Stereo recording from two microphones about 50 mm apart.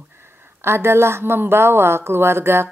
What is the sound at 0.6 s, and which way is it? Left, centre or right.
A woman's voice, right.